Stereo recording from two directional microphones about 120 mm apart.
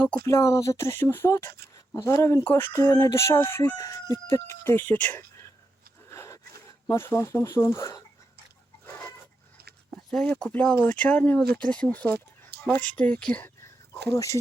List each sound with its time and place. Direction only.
0.3 s speech: 25° left (ahead or behind)
6.1 s a sound: 25° left (ahead or behind)
6.8 s speech: 20° left (ahead or behind)
9.9 s a sound: 5° left (ahead or behind)
10.2 s speech: 10° left (ahead or behind)
13.9 s speech: 25° left (ahead or behind)